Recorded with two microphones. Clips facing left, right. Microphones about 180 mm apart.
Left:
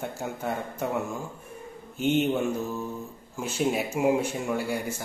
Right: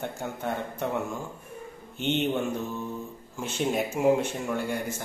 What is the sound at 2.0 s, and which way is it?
A man's voice, 5° left (ahead or behind).